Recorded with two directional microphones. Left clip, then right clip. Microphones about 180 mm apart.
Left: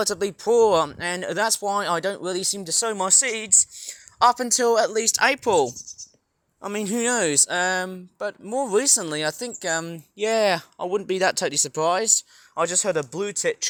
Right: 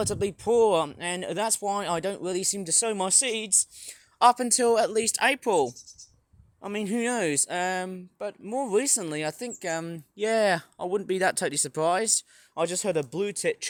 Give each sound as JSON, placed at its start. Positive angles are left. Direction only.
{"t": 0.0, "sound": "speech", "side_deg": -15}